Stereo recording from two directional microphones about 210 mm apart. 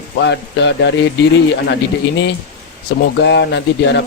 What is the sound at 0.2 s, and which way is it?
Speech, 55° left (ahead or behind).